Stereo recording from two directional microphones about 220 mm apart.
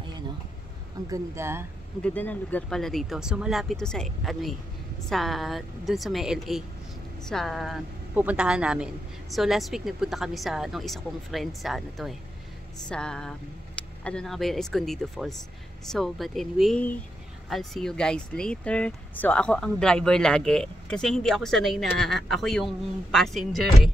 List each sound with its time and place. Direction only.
1.1 s speech: 10° right (ahead or behind)
2.0 s speech: 5° left (ahead or behind)